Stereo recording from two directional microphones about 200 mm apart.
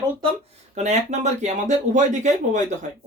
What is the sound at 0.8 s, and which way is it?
Speech, 35° right (ahead or behind).